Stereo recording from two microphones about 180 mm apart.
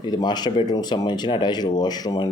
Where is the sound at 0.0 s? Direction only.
25° left (ahead or behind).